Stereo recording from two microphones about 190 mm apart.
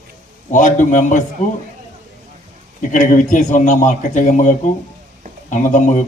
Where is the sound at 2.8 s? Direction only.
40° left (ahead or behind).